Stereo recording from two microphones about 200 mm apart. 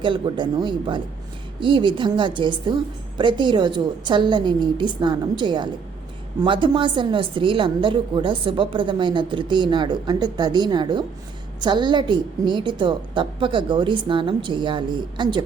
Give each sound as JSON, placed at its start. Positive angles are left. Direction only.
{"t": 0.0, "sound": "a woman's voice", "side_deg": -25}